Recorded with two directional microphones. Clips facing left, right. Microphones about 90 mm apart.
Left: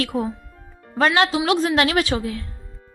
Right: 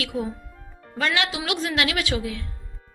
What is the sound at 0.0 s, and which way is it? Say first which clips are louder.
A woman's voice: left 4 dB; 40° left (ahead or behind).